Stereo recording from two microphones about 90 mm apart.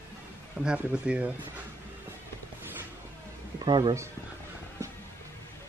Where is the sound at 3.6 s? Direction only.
55° right (ahead or behind).